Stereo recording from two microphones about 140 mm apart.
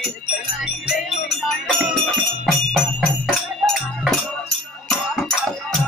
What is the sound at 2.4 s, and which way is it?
Music, 5° left (ahead or behind).